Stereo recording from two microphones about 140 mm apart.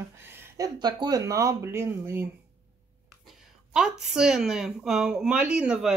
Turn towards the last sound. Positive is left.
turn(degrees=-5)  # may be behind; listen again after turning